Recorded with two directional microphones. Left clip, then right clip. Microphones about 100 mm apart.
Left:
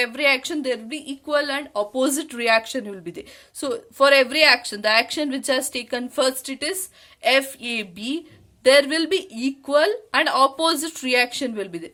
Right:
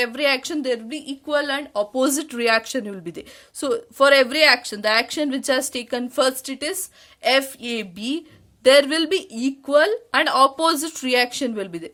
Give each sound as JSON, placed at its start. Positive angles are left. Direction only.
{"t": 0.0, "sound": "a woman's voice", "side_deg": -35}